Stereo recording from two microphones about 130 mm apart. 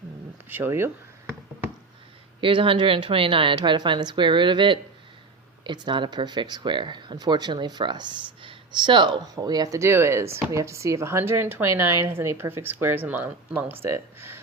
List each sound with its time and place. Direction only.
0.4 s speech: 15° right (ahead or behind)
2.4 s a woman's voice: 40° right (ahead or behind); by 14.4 s 20° right (ahead or behind)